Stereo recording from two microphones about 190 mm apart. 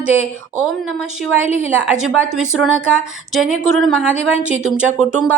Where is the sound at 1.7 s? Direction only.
5° right (ahead or behind).